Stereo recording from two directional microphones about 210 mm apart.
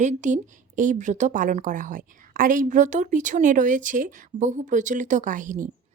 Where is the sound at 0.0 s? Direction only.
35° right (ahead or behind).